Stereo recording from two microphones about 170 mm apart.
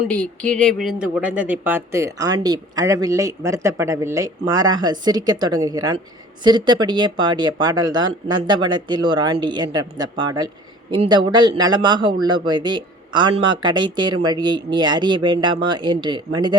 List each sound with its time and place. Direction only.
0.0 s speech: 5° left (ahead or behind); by 16.6 s 25° right (ahead or behind)